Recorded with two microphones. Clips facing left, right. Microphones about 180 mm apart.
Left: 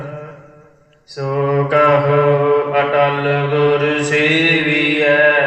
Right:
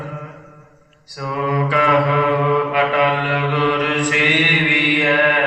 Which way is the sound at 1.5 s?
45° left (ahead or behind).